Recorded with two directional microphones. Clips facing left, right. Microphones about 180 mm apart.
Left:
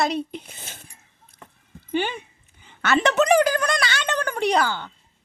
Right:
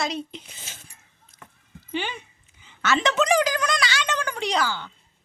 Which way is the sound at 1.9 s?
50° left (ahead or behind).